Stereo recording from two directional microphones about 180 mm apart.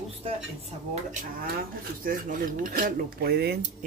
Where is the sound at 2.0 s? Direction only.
50° right (ahead or behind).